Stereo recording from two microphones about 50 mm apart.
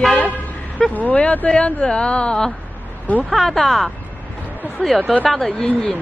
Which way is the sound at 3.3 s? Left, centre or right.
Centre.